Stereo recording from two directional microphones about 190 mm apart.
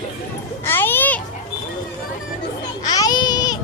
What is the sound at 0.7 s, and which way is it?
Children playing, 10° left (ahead or behind).